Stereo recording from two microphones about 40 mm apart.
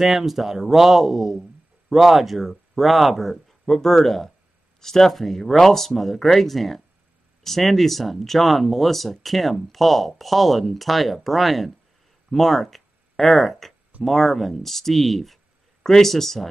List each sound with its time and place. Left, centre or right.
0.0 s speech: centre